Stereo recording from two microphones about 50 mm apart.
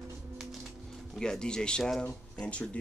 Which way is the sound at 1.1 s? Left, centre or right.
Centre.